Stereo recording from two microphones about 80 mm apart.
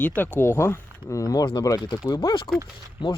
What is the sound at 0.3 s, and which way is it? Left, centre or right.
Speech, left.